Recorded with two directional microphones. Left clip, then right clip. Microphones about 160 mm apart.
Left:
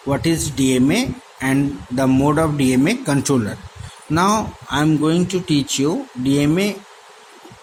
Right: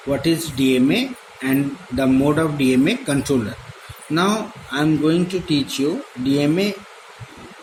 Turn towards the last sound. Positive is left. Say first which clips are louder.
# left 1 dB
turn(degrees=60)  # may be behind; listen again after turning